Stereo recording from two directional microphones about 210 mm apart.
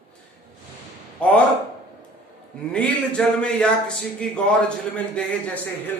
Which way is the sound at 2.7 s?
5° left (ahead or behind).